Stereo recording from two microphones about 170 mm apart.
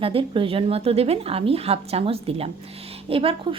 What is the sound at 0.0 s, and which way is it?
A woman's voice, 30° right (ahead or behind).